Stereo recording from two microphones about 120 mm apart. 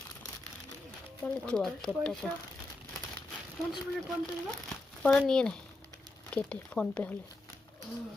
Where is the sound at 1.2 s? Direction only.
5° left (ahead or behind).